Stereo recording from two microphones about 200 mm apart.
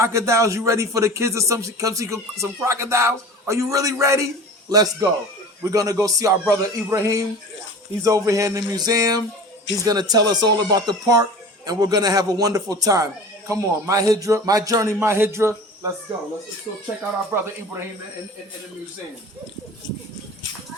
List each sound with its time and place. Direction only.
0.0 s speech: 15° right (ahead or behind)
17.3 s speech: 10° right (ahead or behind)